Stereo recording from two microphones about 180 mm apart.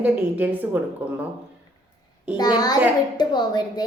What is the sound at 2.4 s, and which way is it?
A woman's voice, 20° left (ahead or behind).